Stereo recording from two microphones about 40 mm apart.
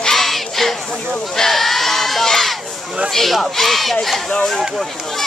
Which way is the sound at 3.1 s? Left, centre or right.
Centre.